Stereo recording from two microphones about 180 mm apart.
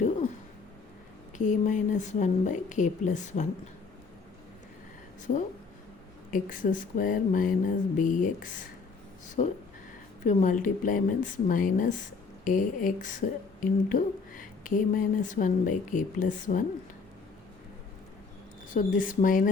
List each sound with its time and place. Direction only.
1.4 s speech: 45° left (ahead or behind)
6.3 s speech: 45° left (ahead or behind)
18.7 s speech: 45° left (ahead or behind)